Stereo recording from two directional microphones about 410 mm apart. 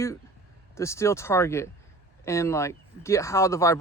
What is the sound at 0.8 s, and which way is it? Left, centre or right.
Speech, centre.